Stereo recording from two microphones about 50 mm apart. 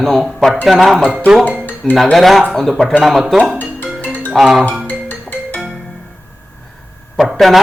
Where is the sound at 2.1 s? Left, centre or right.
Centre.